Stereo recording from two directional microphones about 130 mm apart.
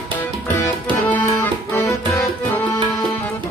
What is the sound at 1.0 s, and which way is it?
Accordion, 15° left (ahead or behind).